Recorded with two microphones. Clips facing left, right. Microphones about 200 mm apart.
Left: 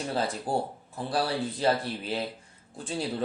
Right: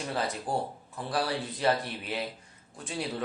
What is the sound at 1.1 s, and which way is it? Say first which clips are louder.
Speech: left 2 dB; 30° left (ahead or behind).